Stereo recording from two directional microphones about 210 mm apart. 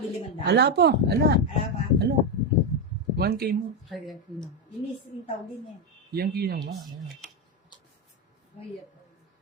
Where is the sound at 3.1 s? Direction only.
50° right (ahead or behind).